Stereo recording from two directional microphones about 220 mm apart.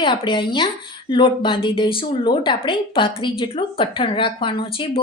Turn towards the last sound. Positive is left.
turn(degrees=25)  # may be behind; listen again after turning